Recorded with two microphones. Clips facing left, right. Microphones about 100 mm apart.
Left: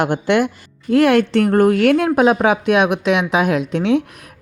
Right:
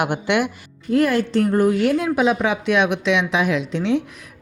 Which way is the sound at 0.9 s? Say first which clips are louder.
Left 5 dB; 75° left (ahead or behind).